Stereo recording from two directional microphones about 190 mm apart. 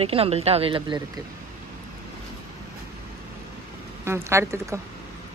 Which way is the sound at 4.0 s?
15° right (ahead or behind).